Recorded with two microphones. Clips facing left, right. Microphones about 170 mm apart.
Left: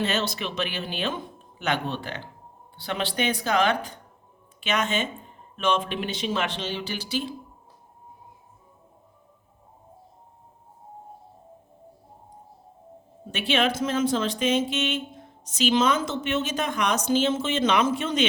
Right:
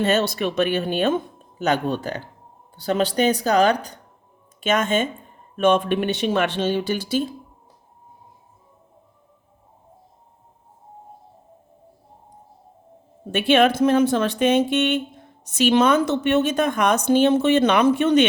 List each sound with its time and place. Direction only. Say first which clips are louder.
0.0 s speech: right 7 dB; 50° right (ahead or behind)
13.3 s a woman's voice: right 8 dB; 55° right (ahead or behind)